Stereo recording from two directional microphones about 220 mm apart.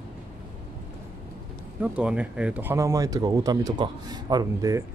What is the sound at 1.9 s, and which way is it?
Speech, 5° right (ahead or behind).